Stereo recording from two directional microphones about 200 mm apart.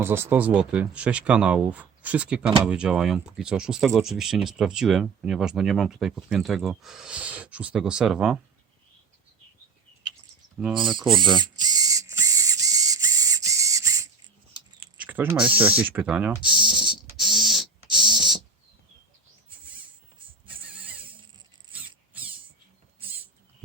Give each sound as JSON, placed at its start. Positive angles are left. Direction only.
{"t": 0.0, "sound": "speech", "side_deg": -10}
{"t": 10.8, "sound": "speech", "side_deg": -25}
{"t": 11.1, "sound": "a sound", "side_deg": -20}
{"t": 14.8, "sound": "mechanisms", "side_deg": -5}
{"t": 21.7, "sound": "rodents", "side_deg": -10}